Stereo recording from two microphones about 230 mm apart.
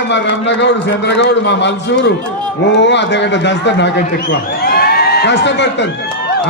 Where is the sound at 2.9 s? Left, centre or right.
Left.